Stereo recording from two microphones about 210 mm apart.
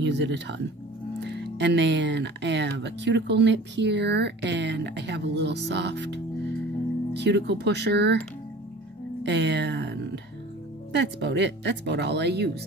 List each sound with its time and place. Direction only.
0.0 s speech: 55° right (ahead or behind)
7.2 s speech: 55° right (ahead or behind)
9.2 s speech: 55° right (ahead or behind)